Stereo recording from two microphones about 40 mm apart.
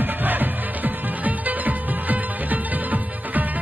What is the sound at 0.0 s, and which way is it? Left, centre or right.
Music, right.